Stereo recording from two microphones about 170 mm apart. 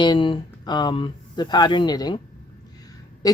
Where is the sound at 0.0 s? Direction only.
30° left (ahead or behind).